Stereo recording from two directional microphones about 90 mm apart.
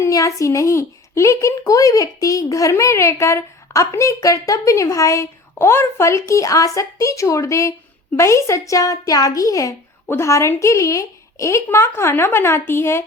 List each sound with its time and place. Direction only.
0.0 s speech: 40° left (ahead or behind)